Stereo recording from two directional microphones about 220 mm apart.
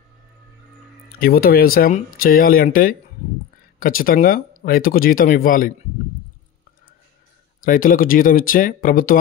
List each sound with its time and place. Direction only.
1.2 s speech: 40° left (ahead or behind)
7.6 s speech: 40° left (ahead or behind)